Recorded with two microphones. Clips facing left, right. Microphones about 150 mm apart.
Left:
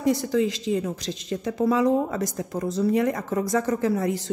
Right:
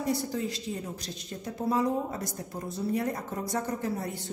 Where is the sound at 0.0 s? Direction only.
90° left.